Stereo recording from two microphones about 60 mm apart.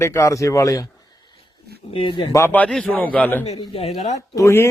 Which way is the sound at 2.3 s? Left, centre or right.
Left.